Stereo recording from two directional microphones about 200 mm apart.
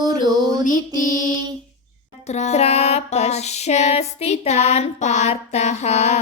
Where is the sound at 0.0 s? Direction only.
20° right (ahead or behind).